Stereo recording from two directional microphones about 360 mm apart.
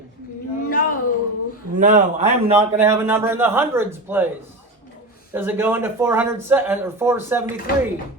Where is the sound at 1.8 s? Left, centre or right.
Right.